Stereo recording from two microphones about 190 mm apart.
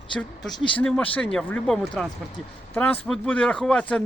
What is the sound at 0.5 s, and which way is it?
Speech, 25° left (ahead or behind).